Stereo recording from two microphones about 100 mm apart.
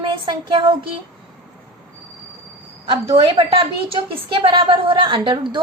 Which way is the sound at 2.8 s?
65° right (ahead or behind).